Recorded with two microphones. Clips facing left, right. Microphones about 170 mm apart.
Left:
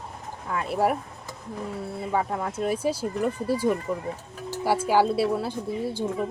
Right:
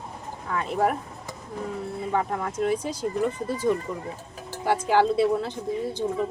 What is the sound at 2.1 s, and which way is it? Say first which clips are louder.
Speech: even; 10° left (ahead or behind).